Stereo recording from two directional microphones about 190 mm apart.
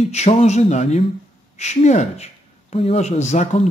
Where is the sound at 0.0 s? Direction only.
35° left (ahead or behind).